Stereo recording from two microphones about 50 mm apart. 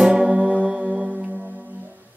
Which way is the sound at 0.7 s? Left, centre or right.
Centre.